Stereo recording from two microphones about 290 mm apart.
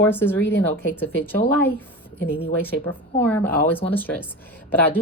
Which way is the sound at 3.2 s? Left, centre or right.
Centre.